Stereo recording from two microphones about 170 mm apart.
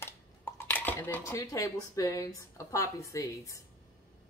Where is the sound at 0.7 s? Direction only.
10° left (ahead or behind).